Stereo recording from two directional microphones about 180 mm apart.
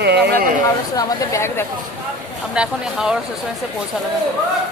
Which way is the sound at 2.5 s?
5° right (ahead or behind).